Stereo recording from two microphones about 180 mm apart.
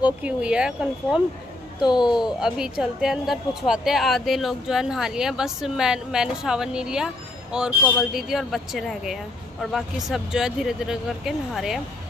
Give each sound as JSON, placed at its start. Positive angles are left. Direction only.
{"t": 0.2, "sound": "a woman's voice", "side_deg": -5}